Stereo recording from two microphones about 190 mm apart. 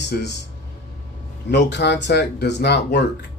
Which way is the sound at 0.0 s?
65° left (ahead or behind).